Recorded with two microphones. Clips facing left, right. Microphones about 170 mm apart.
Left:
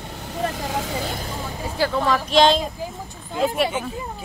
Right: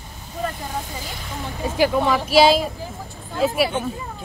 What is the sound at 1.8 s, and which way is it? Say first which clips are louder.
Speech: right 2 dB; 15° right (ahead or behind).